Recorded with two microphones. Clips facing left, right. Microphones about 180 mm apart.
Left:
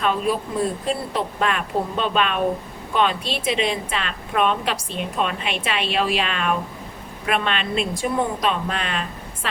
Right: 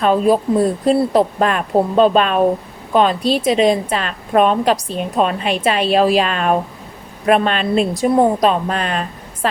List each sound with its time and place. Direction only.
0.0 s a woman's voice: 40° right (ahead or behind)